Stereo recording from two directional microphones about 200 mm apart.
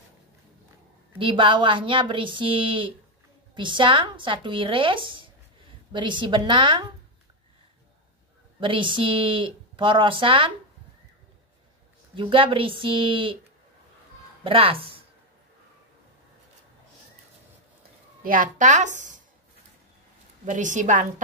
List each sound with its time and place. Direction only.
1.1 s speech: 25° right (ahead or behind)
8.5 s speech: 25° right (ahead or behind)
12.2 s speech: 25° right (ahead or behind)
14.4 s a woman's voice: 25° right (ahead or behind)
18.2 s speech: 45° right (ahead or behind)
20.4 s a woman's voice: 40° right (ahead or behind)